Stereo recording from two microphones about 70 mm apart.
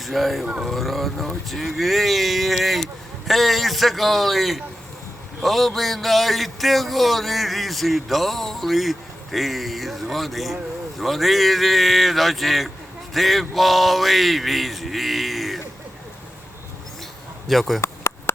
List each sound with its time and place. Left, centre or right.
0.0 s a man's voice: centre
17.5 s a man's voice: centre
17.7 s chop: left